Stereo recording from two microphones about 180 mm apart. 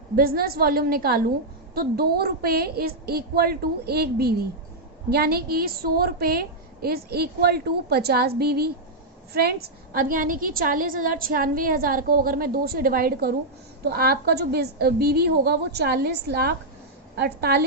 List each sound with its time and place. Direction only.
0.2 s a woman's voice: 55° right (ahead or behind)